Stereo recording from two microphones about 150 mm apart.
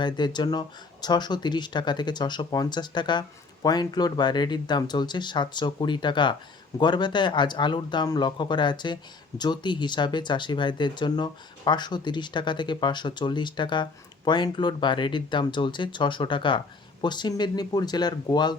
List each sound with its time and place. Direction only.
0.0 s speech: 30° left (ahead or behind)